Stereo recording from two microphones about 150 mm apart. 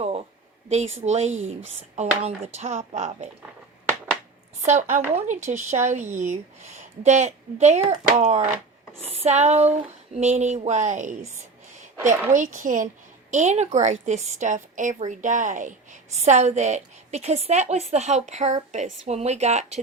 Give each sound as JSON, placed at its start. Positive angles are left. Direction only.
{"t": 0.0, "sound": "a sound", "side_deg": -40}
{"t": 0.7, "sound": "a woman's voice", "side_deg": -50}
{"t": 4.6, "sound": "a woman's voice", "side_deg": -55}
{"t": 12.3, "sound": "speech", "side_deg": -60}
{"t": 13.3, "sound": "a woman's voice", "side_deg": -50}